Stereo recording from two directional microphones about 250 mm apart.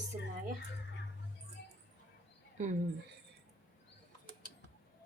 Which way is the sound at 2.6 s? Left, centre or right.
Right.